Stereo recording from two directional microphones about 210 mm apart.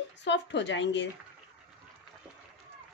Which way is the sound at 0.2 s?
55° left (ahead or behind).